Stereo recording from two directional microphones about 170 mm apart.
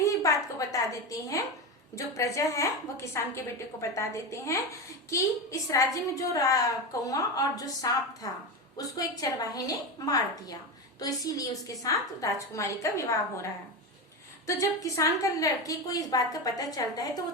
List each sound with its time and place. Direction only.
0.0 s a woman's voice: 20° left (ahead or behind)
14.4 s a woman's voice: 20° left (ahead or behind)